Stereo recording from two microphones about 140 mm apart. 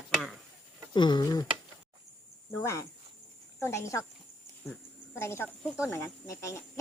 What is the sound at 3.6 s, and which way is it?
Speech, 20° left (ahead or behind).